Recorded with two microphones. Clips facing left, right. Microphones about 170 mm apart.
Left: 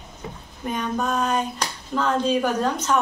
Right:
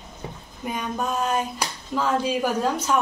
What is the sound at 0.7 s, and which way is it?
Speech, 10° right (ahead or behind).